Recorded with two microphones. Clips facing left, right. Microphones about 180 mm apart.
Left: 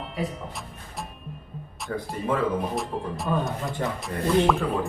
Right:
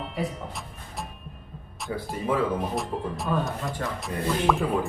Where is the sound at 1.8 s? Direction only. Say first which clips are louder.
Even; centre (ahead or behind).